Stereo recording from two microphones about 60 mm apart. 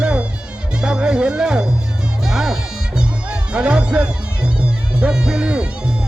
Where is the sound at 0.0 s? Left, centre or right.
Centre.